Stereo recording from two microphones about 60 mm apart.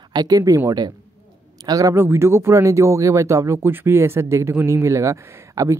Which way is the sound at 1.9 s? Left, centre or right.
Right.